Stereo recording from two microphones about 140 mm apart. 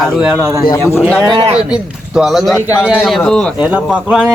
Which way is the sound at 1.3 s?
45° right (ahead or behind).